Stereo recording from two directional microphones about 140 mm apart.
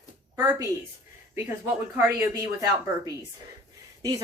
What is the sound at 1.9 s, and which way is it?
Speech, 20° right (ahead or behind).